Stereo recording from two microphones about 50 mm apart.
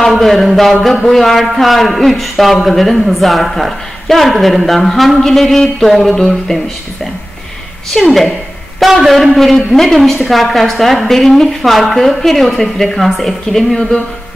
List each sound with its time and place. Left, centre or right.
0.1 s a man's voice: centre
7.9 s a man's voice: centre